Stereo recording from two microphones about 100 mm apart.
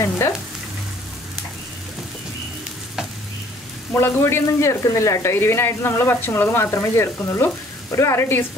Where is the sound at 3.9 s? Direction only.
25° left (ahead or behind).